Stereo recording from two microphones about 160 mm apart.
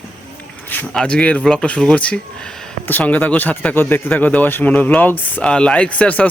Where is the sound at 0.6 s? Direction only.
10° left (ahead or behind).